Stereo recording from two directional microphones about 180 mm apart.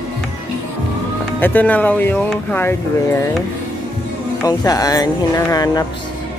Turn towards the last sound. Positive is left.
turn(degrees=20)  # may be behind; listen again after turning